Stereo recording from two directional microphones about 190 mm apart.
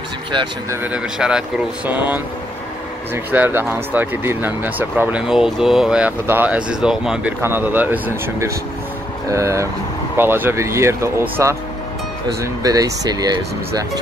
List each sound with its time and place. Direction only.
0.3 s speech: 25° right (ahead or behind)
0.8 s speech: 5° right (ahead or behind)
3.3 s speech: 10° right (ahead or behind)